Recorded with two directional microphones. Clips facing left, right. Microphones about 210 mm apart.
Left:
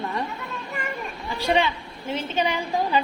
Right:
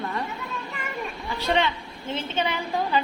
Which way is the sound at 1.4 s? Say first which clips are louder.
Left 2 dB; 15° left (ahead or behind).